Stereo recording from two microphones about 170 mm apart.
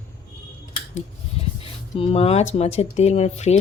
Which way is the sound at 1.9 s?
35° left (ahead or behind).